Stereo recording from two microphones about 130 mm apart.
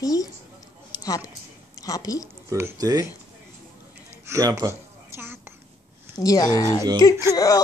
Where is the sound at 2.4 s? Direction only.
20° right (ahead or behind).